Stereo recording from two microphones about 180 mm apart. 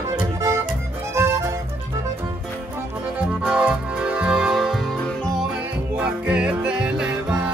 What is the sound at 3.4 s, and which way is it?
Music, 5° right (ahead or behind).